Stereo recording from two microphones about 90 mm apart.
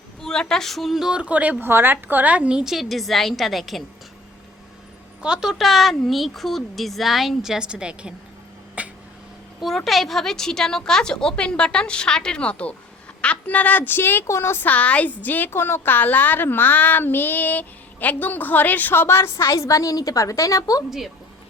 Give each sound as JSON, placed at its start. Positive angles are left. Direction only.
{"t": 0.2, "sound": "a woman's voice", "side_deg": 5}
{"t": 5.2, "sound": "a woman's voice", "side_deg": -5}
{"t": 8.8, "sound": "a sound", "side_deg": -15}
{"t": 9.6, "sound": "a woman's voice", "side_deg": 0}